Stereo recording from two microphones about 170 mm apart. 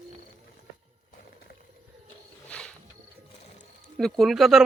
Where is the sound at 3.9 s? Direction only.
Centre (ahead or behind).